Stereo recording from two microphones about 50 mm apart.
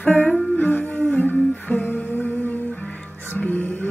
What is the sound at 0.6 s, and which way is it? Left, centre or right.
Humming, left.